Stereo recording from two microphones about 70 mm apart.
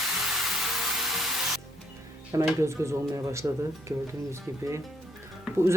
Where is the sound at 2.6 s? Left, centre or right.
Right.